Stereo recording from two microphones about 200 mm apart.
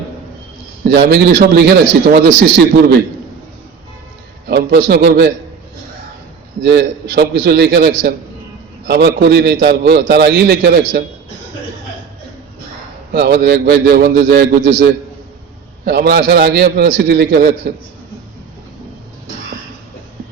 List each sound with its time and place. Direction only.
0.9 s a man's voice: 55° right (ahead or behind)
4.4 s a man's voice: 55° right (ahead or behind)
6.6 s a man's voice: 55° right (ahead or behind)
13.1 s a man's voice: 55° right (ahead or behind)